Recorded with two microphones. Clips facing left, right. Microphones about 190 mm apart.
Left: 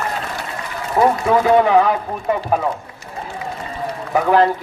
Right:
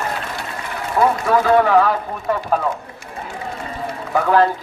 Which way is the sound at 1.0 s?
20° left (ahead or behind).